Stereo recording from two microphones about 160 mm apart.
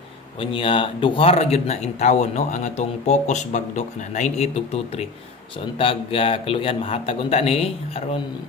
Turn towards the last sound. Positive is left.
turn(degrees=40)  # may be behind; listen again after turning